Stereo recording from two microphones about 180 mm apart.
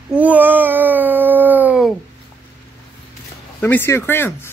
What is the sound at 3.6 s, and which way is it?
Speech, 15° left (ahead or behind).